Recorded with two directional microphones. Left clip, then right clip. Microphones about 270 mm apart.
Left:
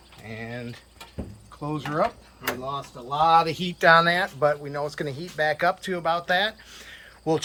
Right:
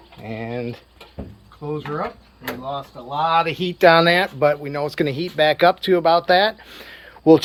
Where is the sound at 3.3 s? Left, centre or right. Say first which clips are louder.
Right 1 dB; centre.